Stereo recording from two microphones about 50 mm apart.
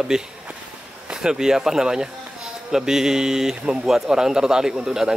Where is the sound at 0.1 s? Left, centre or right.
Centre.